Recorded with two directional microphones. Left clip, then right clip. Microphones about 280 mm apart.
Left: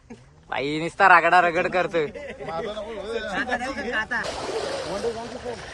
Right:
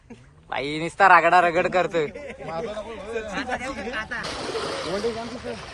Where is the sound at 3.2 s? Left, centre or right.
Left.